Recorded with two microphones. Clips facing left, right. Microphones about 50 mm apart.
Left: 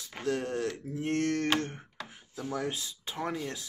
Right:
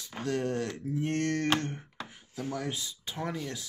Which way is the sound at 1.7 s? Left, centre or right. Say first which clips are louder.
Right 2 dB; centre.